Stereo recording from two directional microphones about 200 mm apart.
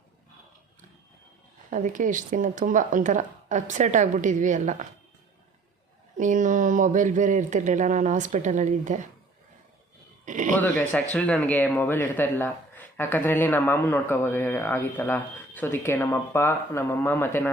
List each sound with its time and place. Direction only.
1.7 s speech: 40° right (ahead or behind)
6.1 s speech: 40° right (ahead or behind)
10.2 s speech: 40° right (ahead or behind)
10.6 s speech: 10° left (ahead or behind)